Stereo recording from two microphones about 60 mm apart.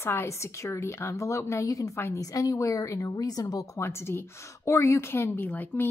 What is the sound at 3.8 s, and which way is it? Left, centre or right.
A woman's voice, left.